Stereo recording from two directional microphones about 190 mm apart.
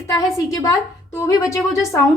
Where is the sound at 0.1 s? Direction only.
20° left (ahead or behind).